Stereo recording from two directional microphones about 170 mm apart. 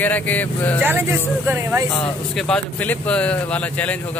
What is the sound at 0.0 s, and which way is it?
Speech, 10° left (ahead or behind).